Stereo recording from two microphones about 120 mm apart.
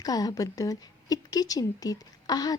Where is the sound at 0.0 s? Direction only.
30° left (ahead or behind).